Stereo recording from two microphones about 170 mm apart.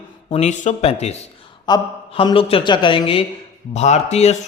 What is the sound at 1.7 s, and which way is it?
A man's voice, 25° left (ahead or behind).